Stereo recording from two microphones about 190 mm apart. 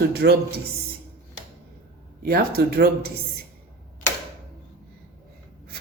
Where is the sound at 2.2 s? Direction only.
55° right (ahead or behind).